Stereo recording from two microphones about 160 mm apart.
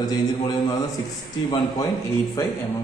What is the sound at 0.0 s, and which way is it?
Speech, 25° left (ahead or behind).